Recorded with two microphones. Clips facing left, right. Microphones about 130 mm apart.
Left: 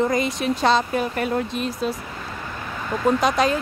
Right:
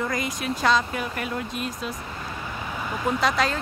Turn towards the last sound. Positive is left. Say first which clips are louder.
# left 4 dB
turn(degrees=20)  # may be behind; listen again after turning